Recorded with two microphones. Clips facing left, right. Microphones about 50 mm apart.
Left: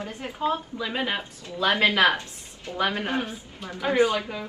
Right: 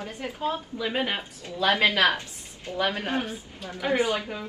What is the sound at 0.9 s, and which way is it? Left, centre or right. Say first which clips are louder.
Speech: left 1 dB; right.